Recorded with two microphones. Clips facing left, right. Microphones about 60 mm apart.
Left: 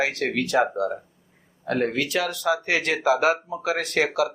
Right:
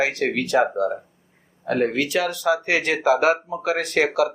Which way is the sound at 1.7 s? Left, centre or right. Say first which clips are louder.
Right 3 dB; centre.